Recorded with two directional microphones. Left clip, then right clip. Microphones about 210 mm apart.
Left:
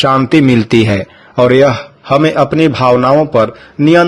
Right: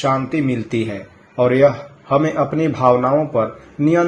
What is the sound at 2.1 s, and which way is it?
A man's voice, 30° left (ahead or behind).